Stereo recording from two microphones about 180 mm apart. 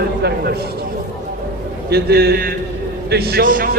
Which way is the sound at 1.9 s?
60° right (ahead or behind).